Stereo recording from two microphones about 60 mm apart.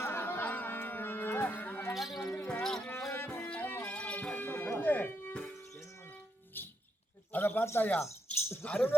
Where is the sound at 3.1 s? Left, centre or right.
Left.